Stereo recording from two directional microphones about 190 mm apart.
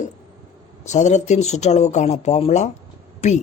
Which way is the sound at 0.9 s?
40° left (ahead or behind).